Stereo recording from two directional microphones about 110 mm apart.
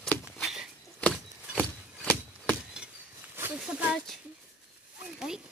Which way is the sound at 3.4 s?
15° right (ahead or behind).